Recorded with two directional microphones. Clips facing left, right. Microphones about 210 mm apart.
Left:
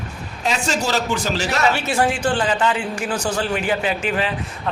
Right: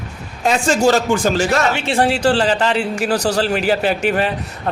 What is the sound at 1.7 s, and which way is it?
Speech, 30° right (ahead or behind).